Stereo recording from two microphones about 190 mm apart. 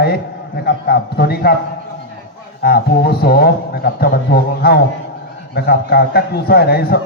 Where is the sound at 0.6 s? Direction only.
55° left (ahead or behind).